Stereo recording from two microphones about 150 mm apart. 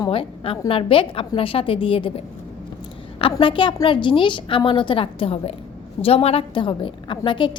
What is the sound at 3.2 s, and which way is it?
A woman's voice, 35° left (ahead or behind).